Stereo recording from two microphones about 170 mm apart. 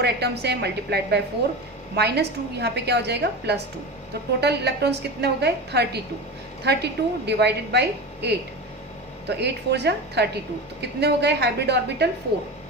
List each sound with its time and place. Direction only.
0.0 s a woman's voice: 75° right (ahead or behind)
9.4 s a woman's voice: 80° right